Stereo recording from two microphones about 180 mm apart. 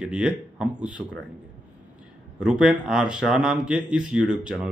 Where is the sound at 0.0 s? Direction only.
5° right (ahead or behind).